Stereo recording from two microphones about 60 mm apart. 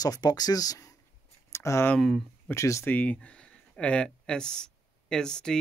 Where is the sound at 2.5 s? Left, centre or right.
Left.